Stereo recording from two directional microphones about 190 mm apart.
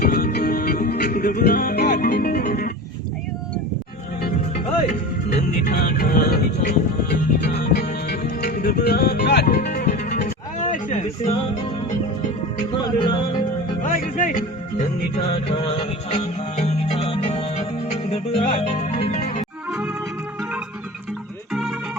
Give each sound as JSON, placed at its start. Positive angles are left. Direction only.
{"t": 0.0, "sound": "music", "side_deg": 50}
{"t": 4.5, "sound": "music", "side_deg": 35}
{"t": 5.4, "sound": "music", "side_deg": 50}
{"t": 9.6, "sound": "music", "side_deg": 45}
{"t": 12.8, "sound": "music", "side_deg": 25}
{"t": 13.8, "sound": "music", "side_deg": 45}
{"t": 21.5, "sound": "music", "side_deg": -5}